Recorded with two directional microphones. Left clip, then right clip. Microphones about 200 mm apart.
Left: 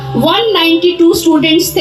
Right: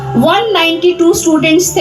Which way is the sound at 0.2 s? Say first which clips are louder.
Even; 45° left (ahead or behind).